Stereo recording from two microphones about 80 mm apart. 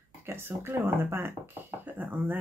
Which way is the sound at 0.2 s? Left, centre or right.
Right.